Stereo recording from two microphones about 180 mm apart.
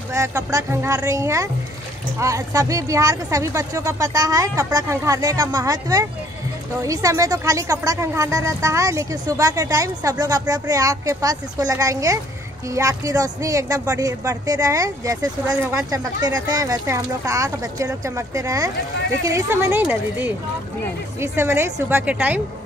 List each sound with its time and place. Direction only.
0.1 s speech: 15° right (ahead or behind)